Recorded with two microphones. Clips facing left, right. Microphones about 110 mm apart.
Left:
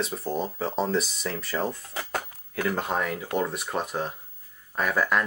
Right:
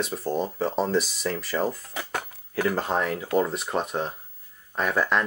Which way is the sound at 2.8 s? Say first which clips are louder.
Right 2 dB; centre (ahead or behind).